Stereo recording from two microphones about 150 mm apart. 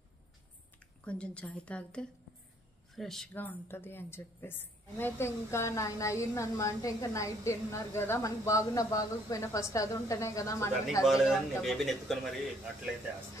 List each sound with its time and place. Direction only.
1.0 s a woman's voice: 5° left (ahead or behind)
3.3 s a woman's voice: 15° left (ahead or behind)
11.1 s a man's voice: centre (ahead or behind)